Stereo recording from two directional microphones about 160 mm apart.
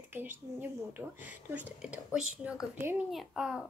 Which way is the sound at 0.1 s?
10° right (ahead or behind).